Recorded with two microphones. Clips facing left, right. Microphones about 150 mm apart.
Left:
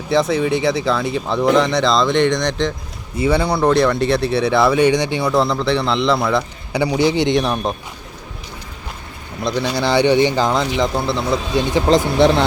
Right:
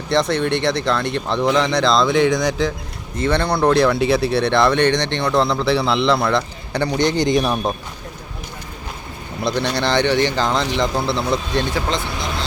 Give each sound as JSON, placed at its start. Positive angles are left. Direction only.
{"t": 0.1, "sound": "speech", "side_deg": 5}
{"t": 3.2, "sound": "speech", "side_deg": 5}
{"t": 9.4, "sound": "speech", "side_deg": 0}
{"t": 12.1, "sound": "speech", "side_deg": 65}